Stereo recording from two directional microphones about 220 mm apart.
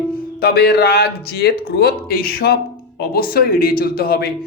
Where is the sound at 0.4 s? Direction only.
45° left (ahead or behind).